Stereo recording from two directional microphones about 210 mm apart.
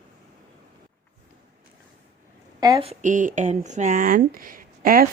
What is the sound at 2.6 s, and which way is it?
Speech, 20° right (ahead or behind).